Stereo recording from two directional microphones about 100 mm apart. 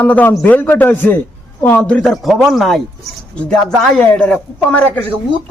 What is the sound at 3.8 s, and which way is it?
Speech, 10° left (ahead or behind).